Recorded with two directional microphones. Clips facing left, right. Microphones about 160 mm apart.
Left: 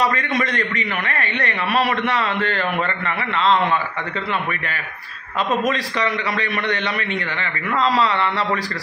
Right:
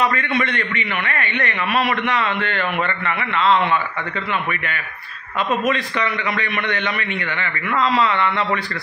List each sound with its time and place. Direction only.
0.0 s a man's voice: 35° left (ahead or behind)
5.7 s a man's voice: 35° left (ahead or behind)